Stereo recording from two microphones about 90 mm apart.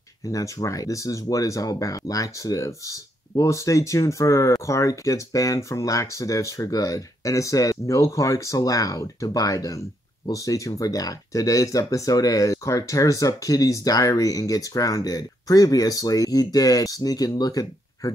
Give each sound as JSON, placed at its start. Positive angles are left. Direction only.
{"t": 0.2, "sound": "speech", "side_deg": 40}